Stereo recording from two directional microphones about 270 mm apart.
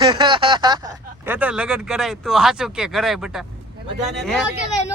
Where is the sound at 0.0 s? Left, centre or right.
Centre.